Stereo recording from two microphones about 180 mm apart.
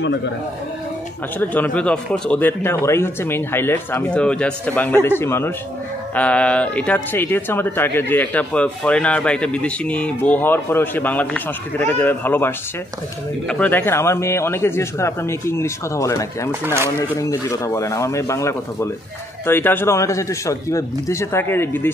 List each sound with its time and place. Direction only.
0.0 s a man's voice: 80° left
1.4 s speech: 10° left (ahead or behind)
16.6 s speech: 15° right (ahead or behind)
17.2 s speech: 15° left (ahead or behind)